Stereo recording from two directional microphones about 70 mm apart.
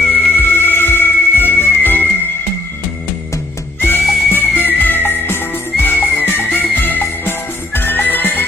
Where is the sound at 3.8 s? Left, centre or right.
Left.